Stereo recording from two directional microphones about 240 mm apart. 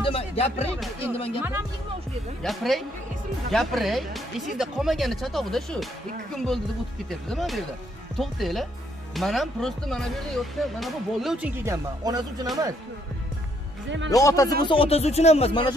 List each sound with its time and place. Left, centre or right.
0.0 s music: left
1.1 s speech: left
2.4 s speech: centre
13.8 s speech: right
14.1 s speech: centre